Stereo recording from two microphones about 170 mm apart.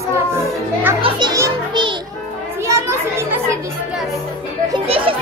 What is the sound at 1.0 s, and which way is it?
Children playing, 25° right (ahead or behind).